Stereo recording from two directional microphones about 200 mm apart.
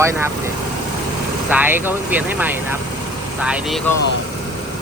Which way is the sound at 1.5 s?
10° right (ahead or behind).